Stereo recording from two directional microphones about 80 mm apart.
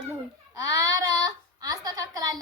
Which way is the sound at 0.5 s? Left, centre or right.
Right.